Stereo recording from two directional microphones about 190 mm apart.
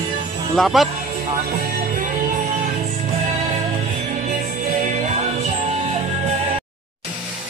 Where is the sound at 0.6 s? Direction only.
Centre (ahead or behind).